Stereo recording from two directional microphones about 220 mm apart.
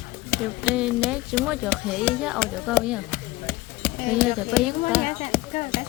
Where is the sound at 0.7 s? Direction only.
5° right (ahead or behind).